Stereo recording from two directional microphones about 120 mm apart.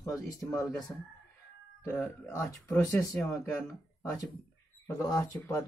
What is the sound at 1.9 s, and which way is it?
Speech, 20° left (ahead or behind).